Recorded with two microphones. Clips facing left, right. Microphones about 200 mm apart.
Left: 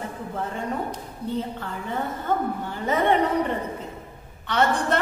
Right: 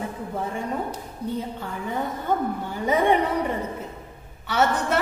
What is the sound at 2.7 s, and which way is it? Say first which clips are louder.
Speech: right 2 dB; 10° right (ahead or behind).